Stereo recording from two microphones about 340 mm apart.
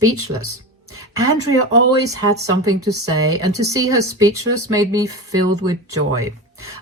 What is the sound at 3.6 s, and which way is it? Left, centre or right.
Speech, centre.